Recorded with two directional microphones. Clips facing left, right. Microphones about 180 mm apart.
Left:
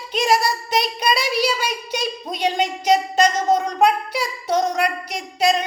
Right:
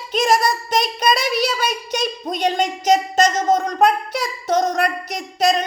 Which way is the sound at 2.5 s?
45° right (ahead or behind).